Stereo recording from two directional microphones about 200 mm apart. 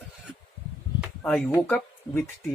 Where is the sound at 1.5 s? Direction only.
10° left (ahead or behind).